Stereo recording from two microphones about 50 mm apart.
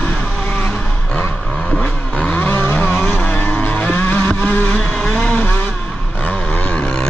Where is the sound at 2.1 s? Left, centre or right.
Left.